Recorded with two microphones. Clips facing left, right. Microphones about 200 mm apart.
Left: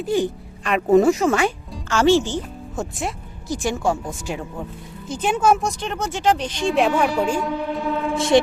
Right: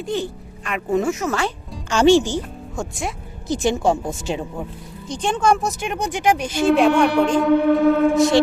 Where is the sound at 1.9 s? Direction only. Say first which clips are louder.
Right 2 dB; 15° right (ahead or behind).